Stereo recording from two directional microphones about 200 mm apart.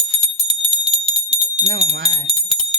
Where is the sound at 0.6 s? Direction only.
30° right (ahead or behind).